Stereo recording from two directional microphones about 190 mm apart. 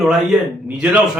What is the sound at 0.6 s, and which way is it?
Speech, 5° right (ahead or behind).